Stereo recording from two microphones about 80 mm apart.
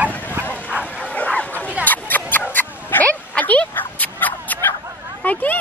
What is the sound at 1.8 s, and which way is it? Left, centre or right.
Mouse, left.